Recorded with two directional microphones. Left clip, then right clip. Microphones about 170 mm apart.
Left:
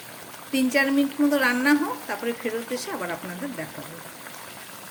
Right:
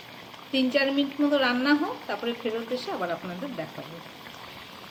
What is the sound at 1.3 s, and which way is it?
Speech, 75° left (ahead or behind).